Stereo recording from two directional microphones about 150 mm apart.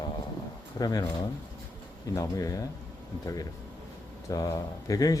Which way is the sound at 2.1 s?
25° left (ahead or behind).